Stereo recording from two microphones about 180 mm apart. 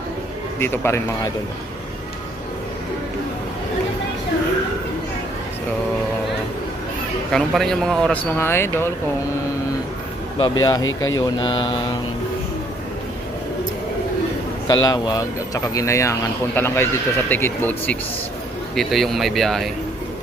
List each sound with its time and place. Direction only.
0.6 s speech: 15° left (ahead or behind)
7.3 s speech: centre (ahead or behind)
10.3 s speech: 25° left (ahead or behind)
14.7 s speech: 20° left (ahead or behind); by 19.7 s centre (ahead or behind)